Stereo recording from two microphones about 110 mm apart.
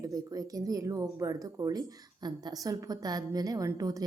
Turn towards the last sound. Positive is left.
turn(degrees=-30)  # may be behind; listen again after turning